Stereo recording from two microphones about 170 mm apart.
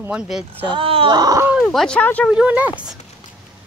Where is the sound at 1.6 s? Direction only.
5° left (ahead or behind).